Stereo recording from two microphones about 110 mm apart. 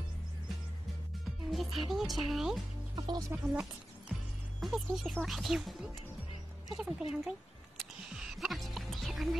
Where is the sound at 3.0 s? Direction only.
35° right (ahead or behind).